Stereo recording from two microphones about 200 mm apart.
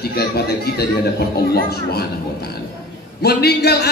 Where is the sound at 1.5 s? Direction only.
50° left (ahead or behind).